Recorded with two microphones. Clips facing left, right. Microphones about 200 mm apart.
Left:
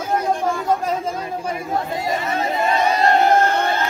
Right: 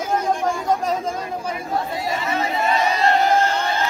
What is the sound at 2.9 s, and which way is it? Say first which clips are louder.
Crowd: left 3 dB; 50° left (ahead or behind).